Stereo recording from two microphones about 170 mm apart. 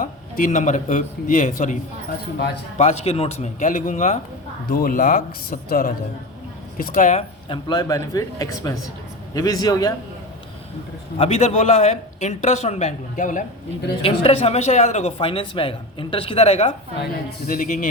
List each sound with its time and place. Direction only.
0.0 s a man's voice: 50° left (ahead or behind)
7.4 s speech: 25° left (ahead or behind)
11.2 s speech: 40° left (ahead or behind)
14.0 s speech: 35° left (ahead or behind)
17.0 s a man's voice: 60° left (ahead or behind)